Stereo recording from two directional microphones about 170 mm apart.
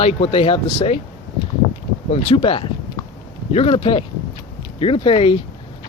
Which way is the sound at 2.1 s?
30° left (ahead or behind).